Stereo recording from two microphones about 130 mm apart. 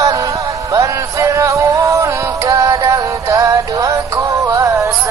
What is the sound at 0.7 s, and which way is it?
Music, 25° right (ahead or behind).